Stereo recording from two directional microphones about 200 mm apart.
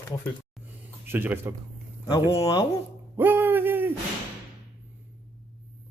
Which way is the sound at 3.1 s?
10° right (ahead or behind).